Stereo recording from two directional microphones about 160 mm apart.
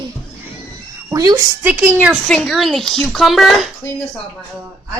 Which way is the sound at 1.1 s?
25° right (ahead or behind).